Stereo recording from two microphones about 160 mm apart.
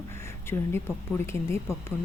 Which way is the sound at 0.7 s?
15° left (ahead or behind).